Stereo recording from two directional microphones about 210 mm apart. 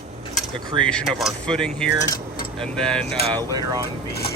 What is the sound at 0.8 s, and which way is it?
Speech, 5° left (ahead or behind).